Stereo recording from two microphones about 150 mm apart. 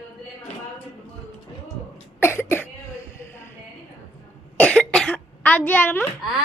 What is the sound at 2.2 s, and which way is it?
Cough, 15° left (ahead or behind).